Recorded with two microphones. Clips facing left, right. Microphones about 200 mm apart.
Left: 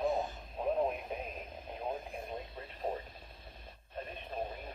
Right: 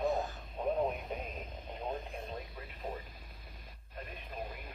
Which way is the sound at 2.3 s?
25° left (ahead or behind).